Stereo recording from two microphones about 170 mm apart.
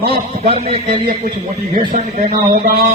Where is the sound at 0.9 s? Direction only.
55° right (ahead or behind).